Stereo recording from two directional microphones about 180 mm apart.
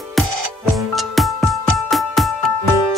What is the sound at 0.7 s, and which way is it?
Music, centre (ahead or behind).